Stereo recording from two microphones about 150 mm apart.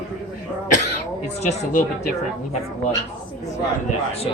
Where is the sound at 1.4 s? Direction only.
45° left (ahead or behind).